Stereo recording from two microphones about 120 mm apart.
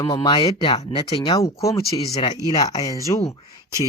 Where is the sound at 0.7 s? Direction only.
40° left (ahead or behind).